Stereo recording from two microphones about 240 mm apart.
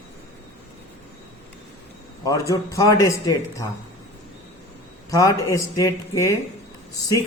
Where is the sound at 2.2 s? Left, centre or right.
Centre.